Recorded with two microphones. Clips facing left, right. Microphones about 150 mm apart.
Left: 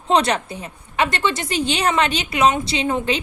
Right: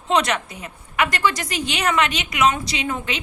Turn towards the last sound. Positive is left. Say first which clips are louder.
# left 5 dB
turn(degrees=30)  # may be behind; listen again after turning